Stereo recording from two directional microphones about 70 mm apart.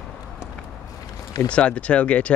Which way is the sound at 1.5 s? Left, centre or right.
Centre.